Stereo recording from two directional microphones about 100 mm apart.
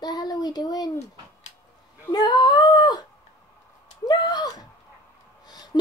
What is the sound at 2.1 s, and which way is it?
Speech, 45° left (ahead or behind).